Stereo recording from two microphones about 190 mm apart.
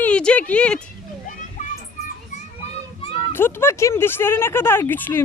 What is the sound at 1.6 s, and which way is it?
Children playing, 45° left (ahead or behind).